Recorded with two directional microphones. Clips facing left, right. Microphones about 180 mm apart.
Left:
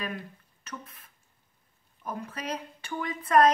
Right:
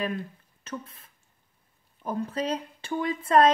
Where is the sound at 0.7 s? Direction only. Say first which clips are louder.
Right 5 dB; 30° right (ahead or behind).